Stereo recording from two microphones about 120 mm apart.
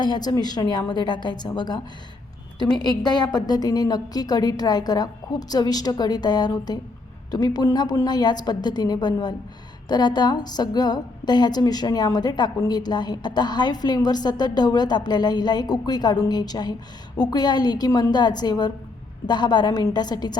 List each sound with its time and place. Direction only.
0.0 s a woman's voice: 35° left (ahead or behind)
3.0 s a woman's voice: 35° left (ahead or behind)